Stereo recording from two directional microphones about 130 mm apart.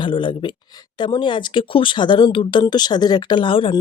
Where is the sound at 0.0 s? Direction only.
40° left (ahead or behind).